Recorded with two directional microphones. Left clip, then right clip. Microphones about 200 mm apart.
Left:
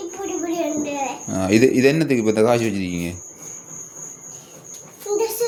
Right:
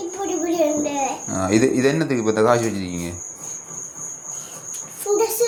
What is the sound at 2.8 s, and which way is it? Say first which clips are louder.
Speech: left 2 dB; centre (ahead or behind).